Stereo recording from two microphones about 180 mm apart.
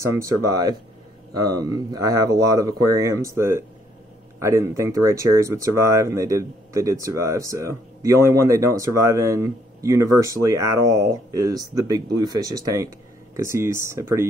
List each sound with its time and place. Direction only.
0.0 s speech: 15° right (ahead or behind)